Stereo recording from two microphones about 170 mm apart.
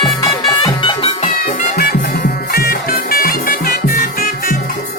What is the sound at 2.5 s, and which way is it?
Music, 60° left (ahead or behind).